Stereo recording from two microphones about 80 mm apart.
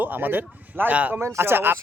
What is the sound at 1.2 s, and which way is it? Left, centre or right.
Speech, right.